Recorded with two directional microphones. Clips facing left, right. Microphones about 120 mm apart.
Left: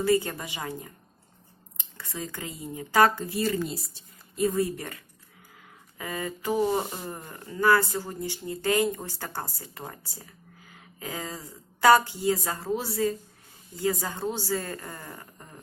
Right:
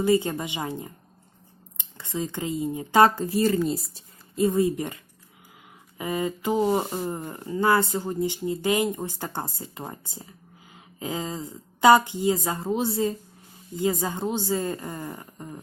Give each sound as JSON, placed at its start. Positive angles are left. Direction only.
{"t": 0.0, "sound": "speech", "side_deg": -20}
{"t": 2.0, "sound": "speech", "side_deg": -25}
{"t": 3.2, "sound": "speech", "side_deg": -40}
{"t": 4.4, "sound": "speech", "side_deg": -25}